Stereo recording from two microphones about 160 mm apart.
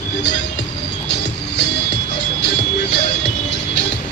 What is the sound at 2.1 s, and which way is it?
Vehicle, 90° left.